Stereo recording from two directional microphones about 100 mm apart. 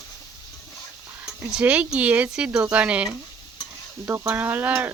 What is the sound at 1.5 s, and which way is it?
Speech, 10° right (ahead or behind).